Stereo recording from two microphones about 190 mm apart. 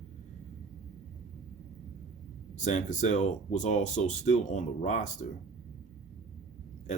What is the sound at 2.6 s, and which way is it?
Speech, 40° left (ahead or behind).